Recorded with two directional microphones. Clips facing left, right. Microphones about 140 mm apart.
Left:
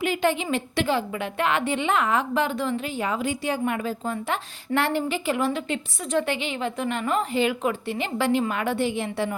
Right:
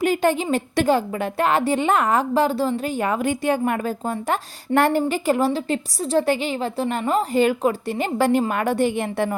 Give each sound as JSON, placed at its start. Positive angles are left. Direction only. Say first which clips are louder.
{"t": 0.0, "sound": "a woman's voice", "louder": "right 4 dB", "side_deg": -45}